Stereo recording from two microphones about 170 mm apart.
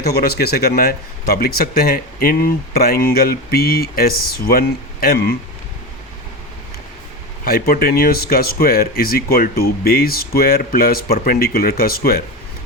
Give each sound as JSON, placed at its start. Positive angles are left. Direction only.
{"t": 0.0, "sound": "a man's voice", "side_deg": 65}
{"t": 7.4, "sound": "a man's voice", "side_deg": 60}